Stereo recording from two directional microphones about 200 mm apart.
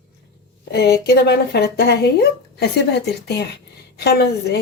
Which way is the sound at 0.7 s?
55° left (ahead or behind).